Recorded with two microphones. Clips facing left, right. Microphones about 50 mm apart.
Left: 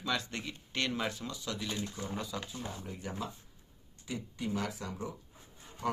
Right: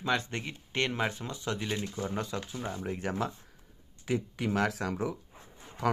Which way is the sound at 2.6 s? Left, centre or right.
Right.